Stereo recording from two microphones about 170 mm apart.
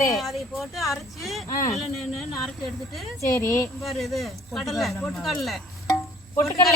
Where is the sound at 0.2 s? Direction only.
Centre (ahead or behind).